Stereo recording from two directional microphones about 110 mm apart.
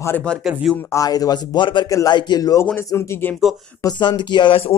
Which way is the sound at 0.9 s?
30° left (ahead or behind).